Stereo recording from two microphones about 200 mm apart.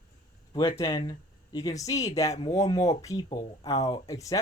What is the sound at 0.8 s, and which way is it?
Speech, 20° left (ahead or behind).